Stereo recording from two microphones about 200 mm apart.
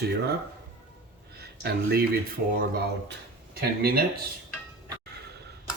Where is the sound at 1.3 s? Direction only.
55° right (ahead or behind).